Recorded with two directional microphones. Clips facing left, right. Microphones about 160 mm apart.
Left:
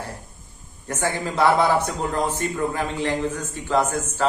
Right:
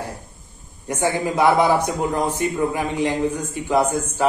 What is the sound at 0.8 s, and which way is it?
A man's voice, 15° right (ahead or behind).